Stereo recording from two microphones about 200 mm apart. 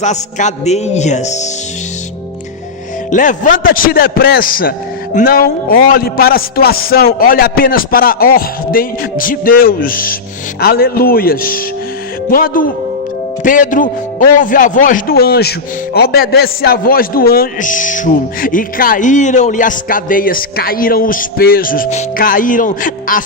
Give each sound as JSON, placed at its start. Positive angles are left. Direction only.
{"t": 0.0, "sound": "music", "side_deg": 35}
{"t": 3.1, "sound": "a man's voice", "side_deg": 40}